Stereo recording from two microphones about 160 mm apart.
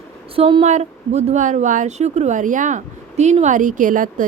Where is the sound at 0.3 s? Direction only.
35° right (ahead or behind).